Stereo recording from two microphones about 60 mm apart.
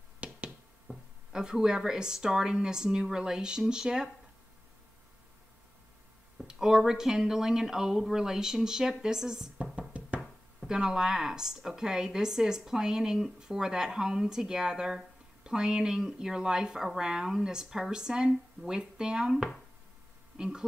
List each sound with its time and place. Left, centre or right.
0.2 s finger snapping: right
0.9 s a sound: right
1.3 s a woman's voice: centre
6.4 s a woman's voice: centre
9.6 s music: right
10.7 s a woman's voice: centre
20.3 s speech: centre